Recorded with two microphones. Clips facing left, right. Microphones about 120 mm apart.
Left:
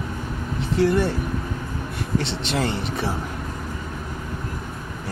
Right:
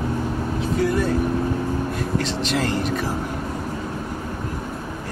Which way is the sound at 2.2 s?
90° right.